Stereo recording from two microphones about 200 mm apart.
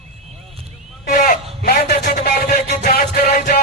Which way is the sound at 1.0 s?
40° left (ahead or behind).